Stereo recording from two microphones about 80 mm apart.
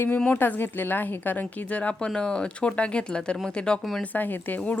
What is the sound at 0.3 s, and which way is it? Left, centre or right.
A woman's voice, left.